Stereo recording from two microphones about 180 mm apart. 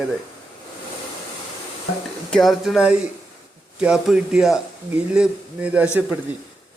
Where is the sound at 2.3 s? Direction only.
Centre (ahead or behind).